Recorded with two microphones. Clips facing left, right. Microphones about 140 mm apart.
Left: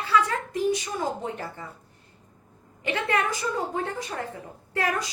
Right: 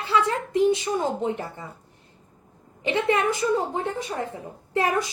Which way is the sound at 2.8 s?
20° right (ahead or behind).